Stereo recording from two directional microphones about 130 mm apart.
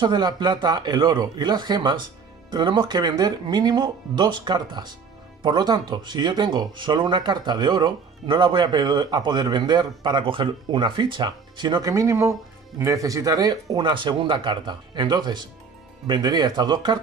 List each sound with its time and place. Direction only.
0.0 s speech: 35° right (ahead or behind)